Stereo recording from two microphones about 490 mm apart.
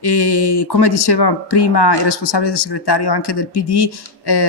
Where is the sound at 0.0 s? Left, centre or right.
Left.